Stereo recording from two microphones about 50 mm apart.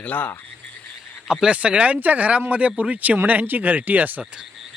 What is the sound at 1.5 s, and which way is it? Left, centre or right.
Speech, right.